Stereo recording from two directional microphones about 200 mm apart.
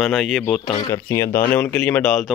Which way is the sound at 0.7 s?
20° left (ahead or behind).